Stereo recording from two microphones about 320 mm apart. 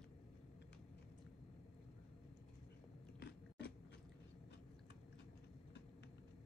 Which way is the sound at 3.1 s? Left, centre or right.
Left.